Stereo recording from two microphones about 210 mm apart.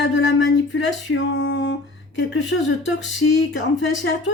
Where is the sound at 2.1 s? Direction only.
60° left (ahead or behind).